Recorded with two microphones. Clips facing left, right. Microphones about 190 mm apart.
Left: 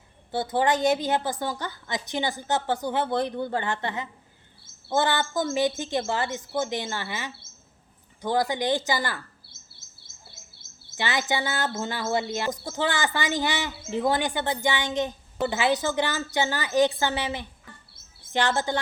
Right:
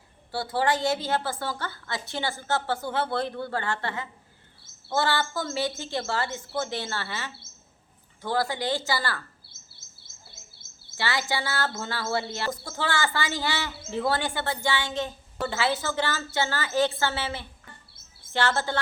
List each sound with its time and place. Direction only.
0.3 s speech: 20° left (ahead or behind)
10.9 s speech: 20° left (ahead or behind)